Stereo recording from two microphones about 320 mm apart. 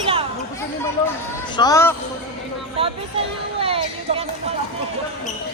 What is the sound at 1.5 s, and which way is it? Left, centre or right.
Speech, centre.